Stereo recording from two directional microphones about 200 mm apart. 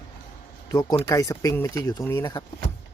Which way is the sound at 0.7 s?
20° left (ahead or behind).